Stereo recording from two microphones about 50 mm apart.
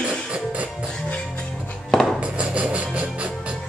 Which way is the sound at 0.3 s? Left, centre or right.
Right.